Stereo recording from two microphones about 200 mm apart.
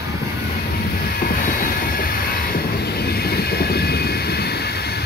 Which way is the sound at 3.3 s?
50° left (ahead or behind).